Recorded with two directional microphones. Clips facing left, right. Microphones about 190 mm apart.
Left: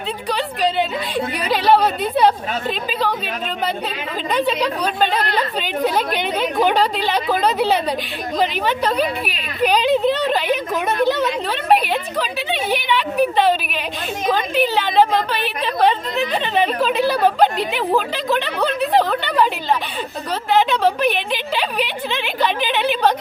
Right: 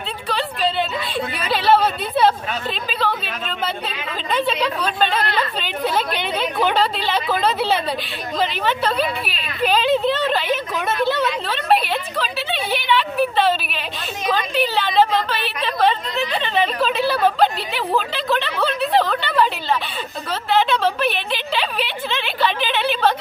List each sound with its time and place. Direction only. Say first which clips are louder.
0.3 s a woman's voice: left 1 dB; 15° left (ahead or behind)
4.3 s a woman's voice: left 1 dB; 15° left (ahead or behind)
6.4 s a woman's voice: left 2 dB; 15° left (ahead or behind)
20.5 s a woman's voice: left 2 dB; 15° left (ahead or behind)